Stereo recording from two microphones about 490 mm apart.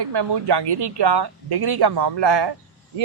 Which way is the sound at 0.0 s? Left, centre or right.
Right.